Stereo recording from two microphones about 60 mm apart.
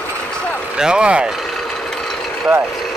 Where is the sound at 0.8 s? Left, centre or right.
Centre.